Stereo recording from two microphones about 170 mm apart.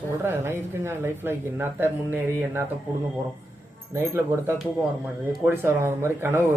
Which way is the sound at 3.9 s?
15° right (ahead or behind).